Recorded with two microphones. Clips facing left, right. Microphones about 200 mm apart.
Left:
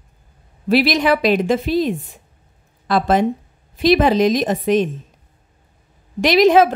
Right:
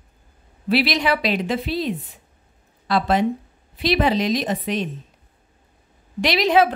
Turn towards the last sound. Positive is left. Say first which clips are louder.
# left 6 dB
turn(degrees=45)  # may be behind; listen again after turning